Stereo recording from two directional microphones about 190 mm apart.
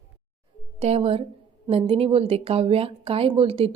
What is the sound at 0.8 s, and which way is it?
A woman's voice, 30° right (ahead or behind).